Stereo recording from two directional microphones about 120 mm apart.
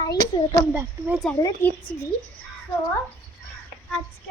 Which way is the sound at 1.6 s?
20° left (ahead or behind).